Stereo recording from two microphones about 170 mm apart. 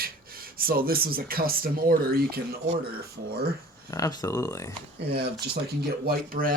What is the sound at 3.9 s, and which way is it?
Speech, 20° left (ahead or behind).